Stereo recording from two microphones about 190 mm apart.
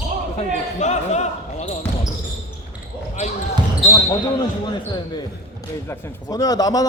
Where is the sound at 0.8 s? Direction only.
35° left (ahead or behind).